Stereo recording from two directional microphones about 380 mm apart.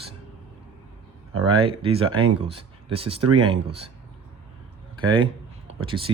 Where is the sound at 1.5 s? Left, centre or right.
Centre.